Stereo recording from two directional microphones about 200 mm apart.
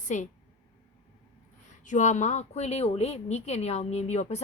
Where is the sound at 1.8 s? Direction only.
40° left (ahead or behind).